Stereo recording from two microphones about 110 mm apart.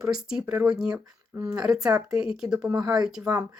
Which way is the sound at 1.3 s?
25° right (ahead or behind).